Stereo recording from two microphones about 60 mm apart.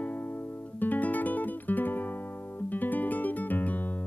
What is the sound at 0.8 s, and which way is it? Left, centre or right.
Guitar, left.